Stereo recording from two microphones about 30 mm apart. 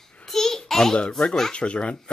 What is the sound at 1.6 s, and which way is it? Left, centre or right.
Speech, left.